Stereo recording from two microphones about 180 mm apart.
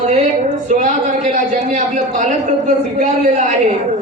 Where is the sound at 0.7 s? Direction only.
45° right (ahead or behind).